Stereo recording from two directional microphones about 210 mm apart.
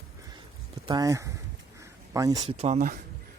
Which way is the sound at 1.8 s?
15° right (ahead or behind).